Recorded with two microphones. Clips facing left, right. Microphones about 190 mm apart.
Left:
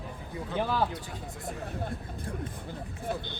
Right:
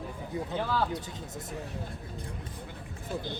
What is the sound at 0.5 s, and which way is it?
Speech, 15° left (ahead or behind).